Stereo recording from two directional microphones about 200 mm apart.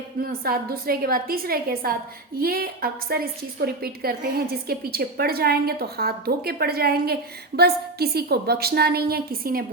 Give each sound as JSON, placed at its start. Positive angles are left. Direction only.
{"t": 0.2, "sound": "a woman's voice", "side_deg": -50}